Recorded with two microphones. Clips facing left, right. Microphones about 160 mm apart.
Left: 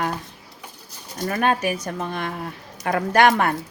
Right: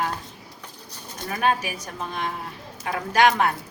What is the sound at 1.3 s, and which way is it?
Speech, 55° left (ahead or behind).